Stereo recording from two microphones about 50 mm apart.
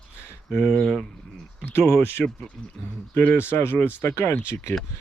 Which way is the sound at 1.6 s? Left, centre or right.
Left.